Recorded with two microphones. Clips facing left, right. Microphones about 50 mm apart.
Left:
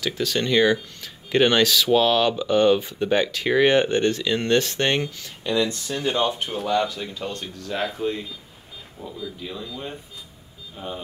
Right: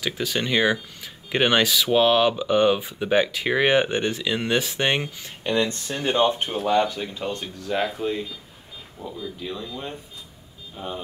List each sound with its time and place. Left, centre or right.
0.0 s speech: centre
5.2 s speech: right
6.5 s speech: centre
7.4 s speech: centre
10.8 s speech: centre